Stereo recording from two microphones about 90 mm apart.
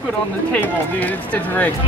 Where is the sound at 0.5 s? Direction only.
20° left (ahead or behind).